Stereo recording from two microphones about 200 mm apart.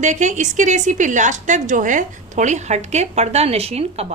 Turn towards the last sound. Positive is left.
turn(degrees=-30)  # may be behind; listen again after turning